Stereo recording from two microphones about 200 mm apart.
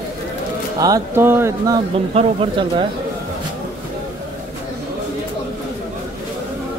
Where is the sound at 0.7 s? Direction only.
15° right (ahead or behind).